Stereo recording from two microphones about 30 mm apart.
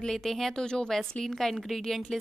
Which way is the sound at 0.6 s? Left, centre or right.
Left.